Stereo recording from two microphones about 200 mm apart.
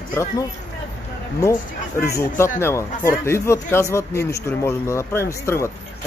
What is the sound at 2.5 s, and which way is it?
Speech, 10° left (ahead or behind).